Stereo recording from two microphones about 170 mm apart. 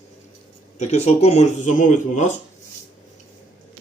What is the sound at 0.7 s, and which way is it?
Speech, 40° left (ahead or behind).